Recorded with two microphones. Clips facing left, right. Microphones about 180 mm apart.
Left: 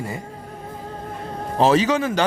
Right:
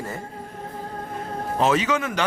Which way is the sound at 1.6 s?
35° left (ahead or behind).